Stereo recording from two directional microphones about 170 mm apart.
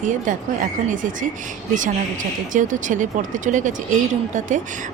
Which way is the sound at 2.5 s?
50° right (ahead or behind).